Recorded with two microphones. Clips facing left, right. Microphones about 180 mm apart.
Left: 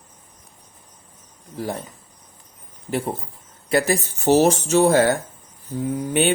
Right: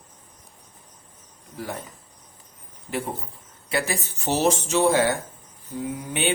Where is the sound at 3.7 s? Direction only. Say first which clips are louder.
Left 7 dB; 40° left (ahead or behind).